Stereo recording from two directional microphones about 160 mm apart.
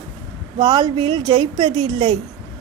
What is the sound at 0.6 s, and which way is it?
Speech, 25° right (ahead or behind).